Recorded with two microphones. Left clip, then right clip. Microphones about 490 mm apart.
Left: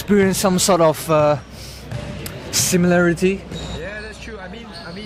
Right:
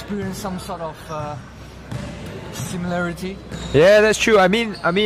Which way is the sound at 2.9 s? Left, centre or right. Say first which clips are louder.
Left 7 dB; left.